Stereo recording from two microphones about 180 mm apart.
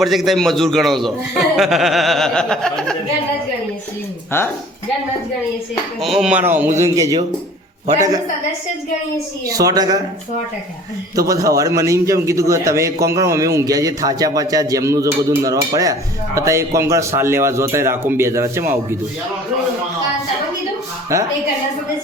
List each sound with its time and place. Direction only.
0.0 s a man's voice: centre (ahead or behind)
4.3 s speech: 15° left (ahead or behind)
6.0 s a man's voice: centre (ahead or behind); by 7.2 s 20° right (ahead or behind)
9.5 s a woman's voice: 20° right (ahead or behind)
11.1 s a man's voice: 20° right (ahead or behind)
21.1 s a man's voice: 15° right (ahead or behind)